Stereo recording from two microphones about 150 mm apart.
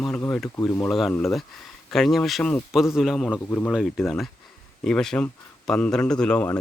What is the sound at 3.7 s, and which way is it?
Speech, 5° right (ahead or behind).